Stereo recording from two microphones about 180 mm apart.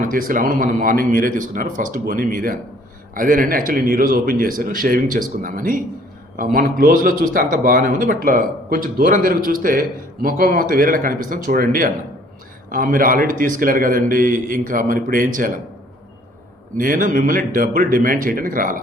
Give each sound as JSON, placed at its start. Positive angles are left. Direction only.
{"t": 0.0, "sound": "speech", "side_deg": -50}
{"t": 16.7, "sound": "speech", "side_deg": -50}